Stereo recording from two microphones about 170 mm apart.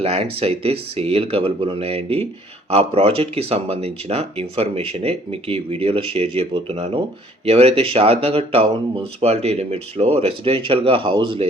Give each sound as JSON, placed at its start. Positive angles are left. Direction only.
{"t": 0.0, "sound": "speech", "side_deg": -35}